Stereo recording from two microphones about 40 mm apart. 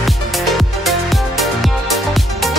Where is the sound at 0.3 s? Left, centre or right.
Centre.